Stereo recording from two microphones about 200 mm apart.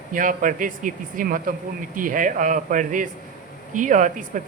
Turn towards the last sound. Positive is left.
turn(degrees=-40)  # may be behind; listen again after turning